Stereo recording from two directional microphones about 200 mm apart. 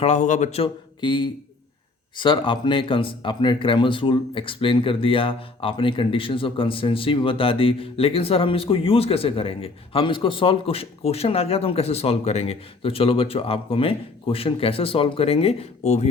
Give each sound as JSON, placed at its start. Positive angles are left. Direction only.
{"t": 0.0, "sound": "a man's voice", "side_deg": 35}